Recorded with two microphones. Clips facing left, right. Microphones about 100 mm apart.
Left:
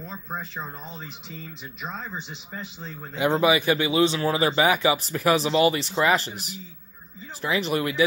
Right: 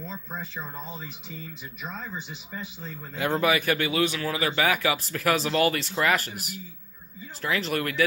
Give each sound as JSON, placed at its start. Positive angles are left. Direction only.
{"t": 1.8, "sound": "speech", "side_deg": 20}